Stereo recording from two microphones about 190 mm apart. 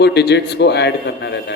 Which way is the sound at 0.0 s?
60° left (ahead or behind).